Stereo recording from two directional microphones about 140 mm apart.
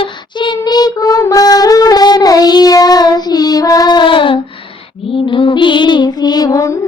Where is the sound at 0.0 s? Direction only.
35° left (ahead or behind).